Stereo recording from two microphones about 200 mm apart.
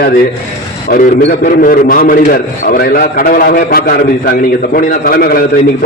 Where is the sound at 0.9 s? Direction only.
50° left (ahead or behind).